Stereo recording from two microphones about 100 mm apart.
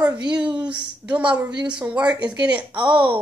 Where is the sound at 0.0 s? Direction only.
10° right (ahead or behind).